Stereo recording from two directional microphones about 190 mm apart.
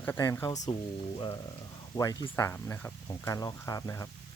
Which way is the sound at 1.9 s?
20° left (ahead or behind).